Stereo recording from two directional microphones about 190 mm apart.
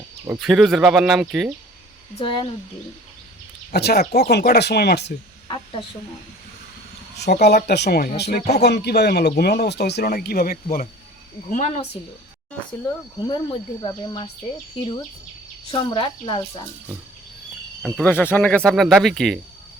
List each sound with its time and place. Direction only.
0.3 s speech: centre (ahead or behind)
2.1 s speech: 25° left (ahead or behind)
3.7 s speech: 55° left (ahead or behind)
7.4 s speech: 60° left (ahead or behind)
11.5 s a woman's voice: 40° left (ahead or behind)
12.8 s speech: 25° left (ahead or behind)
15.7 s speech: 25° left (ahead or behind)
17.8 s speech: 5° left (ahead or behind)